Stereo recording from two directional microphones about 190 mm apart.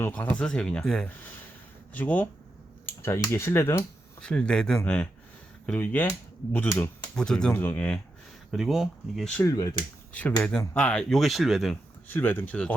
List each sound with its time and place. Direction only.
0.0 s speech: 5° left (ahead or behind)
8.5 s speech: centre (ahead or behind)
9.4 s speech: 15° left (ahead or behind)
10.1 s speech: 5° left (ahead or behind)